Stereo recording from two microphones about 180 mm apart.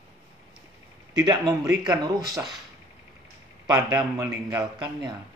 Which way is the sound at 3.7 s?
25° right (ahead or behind).